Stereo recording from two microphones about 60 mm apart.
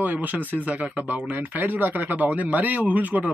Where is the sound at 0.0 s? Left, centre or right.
Right.